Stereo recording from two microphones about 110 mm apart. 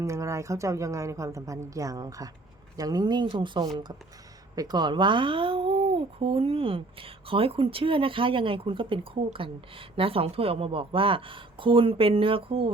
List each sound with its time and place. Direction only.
0.0 s a woman's voice: 25° right (ahead or behind); by 12.7 s 55° right (ahead or behind)